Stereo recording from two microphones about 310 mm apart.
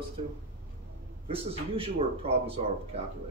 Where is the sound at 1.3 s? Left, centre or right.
Centre.